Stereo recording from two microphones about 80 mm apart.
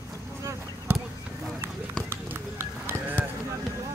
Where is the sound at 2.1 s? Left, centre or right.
Right.